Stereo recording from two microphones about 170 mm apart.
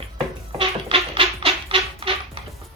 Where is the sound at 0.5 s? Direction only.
30° right (ahead or behind).